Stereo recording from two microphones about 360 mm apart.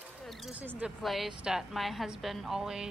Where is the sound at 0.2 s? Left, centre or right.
Centre.